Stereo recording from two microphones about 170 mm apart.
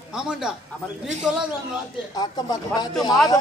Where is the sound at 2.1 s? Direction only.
25° left (ahead or behind).